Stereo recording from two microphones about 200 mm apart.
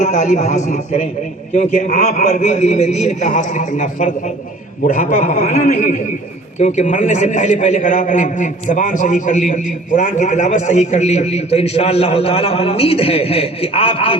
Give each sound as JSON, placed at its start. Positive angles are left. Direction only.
{"t": 0.0, "sound": "a man's voice", "side_deg": 35}